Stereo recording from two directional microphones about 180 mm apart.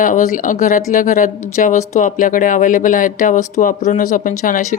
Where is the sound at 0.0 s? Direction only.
45° left (ahead or behind).